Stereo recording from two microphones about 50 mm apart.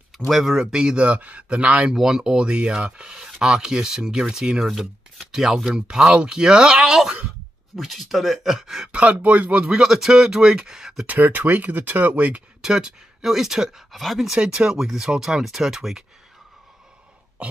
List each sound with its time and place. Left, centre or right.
0.3 s speech: centre
0.6 s speech: centre
1.9 s speech: centre
4.6 s speech: centre
8.9 s speech: right
9.8 s speech: centre
11.1 s speech: right
12.6 s speech: centre
14.3 s speech: centre